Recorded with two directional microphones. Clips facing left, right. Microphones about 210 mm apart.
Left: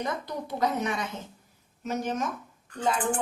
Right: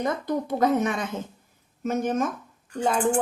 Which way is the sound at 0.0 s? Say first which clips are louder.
Right 6 dB; 50° right (ahead or behind).